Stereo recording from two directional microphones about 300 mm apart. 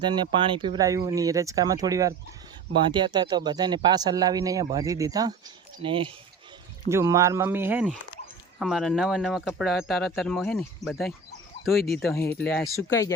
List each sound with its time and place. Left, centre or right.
0.0 s speech: centre